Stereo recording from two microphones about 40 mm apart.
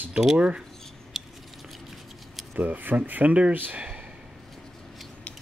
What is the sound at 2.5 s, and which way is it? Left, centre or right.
Speech, right.